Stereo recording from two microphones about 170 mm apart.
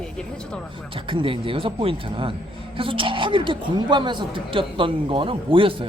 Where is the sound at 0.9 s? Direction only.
30° right (ahead or behind).